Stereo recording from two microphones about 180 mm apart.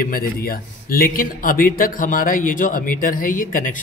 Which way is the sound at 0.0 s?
55° left (ahead or behind).